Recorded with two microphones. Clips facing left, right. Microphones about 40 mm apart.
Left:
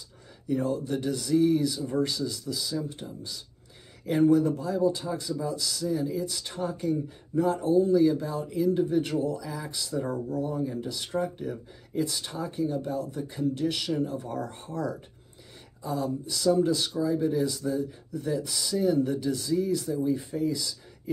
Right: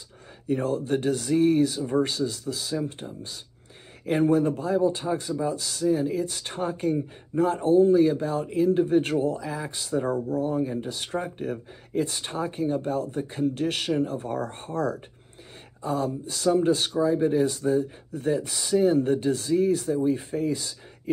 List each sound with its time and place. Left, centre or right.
0.5 s speech: right